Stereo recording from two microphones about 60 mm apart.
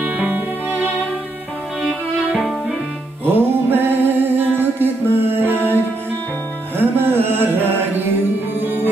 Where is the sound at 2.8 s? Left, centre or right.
Right.